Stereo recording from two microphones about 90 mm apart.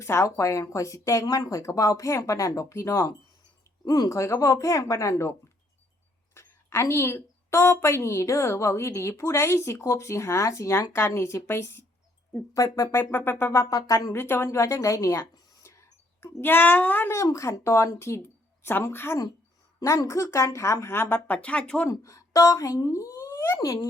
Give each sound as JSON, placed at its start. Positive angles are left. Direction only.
{"t": 0.0, "sound": "a woman's voice", "side_deg": 30}
{"t": 3.8, "sound": "speech", "side_deg": 50}
{"t": 4.1, "sound": "a woman's voice", "side_deg": 35}
{"t": 6.3, "sound": "a woman's voice", "side_deg": 30}
{"t": 12.5, "sound": "a woman's voice", "side_deg": 40}
{"t": 13.1, "sound": "a child's voice", "side_deg": 20}
{"t": 13.5, "sound": "a woman's voice", "side_deg": 40}
{"t": 14.2, "sound": "a woman's voice", "side_deg": 25}
{"t": 16.2, "sound": "a child's voice", "side_deg": 20}
{"t": 17.2, "sound": "a woman's voice", "side_deg": 35}
{"t": 21.3, "sound": "speech", "side_deg": 15}
{"t": 21.8, "sound": "speech", "side_deg": 35}